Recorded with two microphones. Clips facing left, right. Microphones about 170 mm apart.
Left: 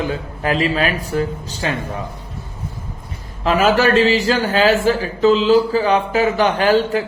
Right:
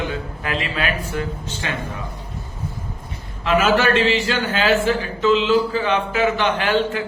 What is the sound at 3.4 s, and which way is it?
A man's voice, 40° left (ahead or behind).